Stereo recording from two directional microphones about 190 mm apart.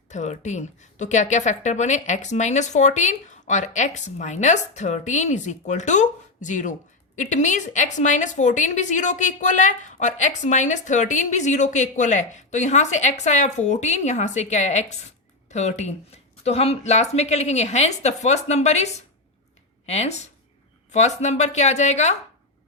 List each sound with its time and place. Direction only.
0.1 s a woman's voice: 40° left (ahead or behind)